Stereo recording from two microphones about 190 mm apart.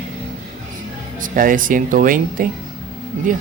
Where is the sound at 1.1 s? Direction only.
45° right (ahead or behind).